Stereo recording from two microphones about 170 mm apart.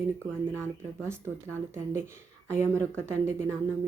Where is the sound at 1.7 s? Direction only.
15° right (ahead or behind).